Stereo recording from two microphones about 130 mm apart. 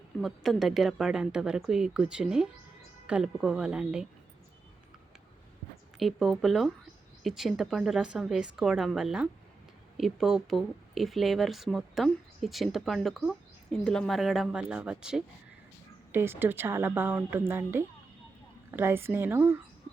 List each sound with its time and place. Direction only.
0.2 s a woman's voice: centre (ahead or behind)
6.0 s speech: centre (ahead or behind)
16.1 s a woman's voice: 20° right (ahead or behind)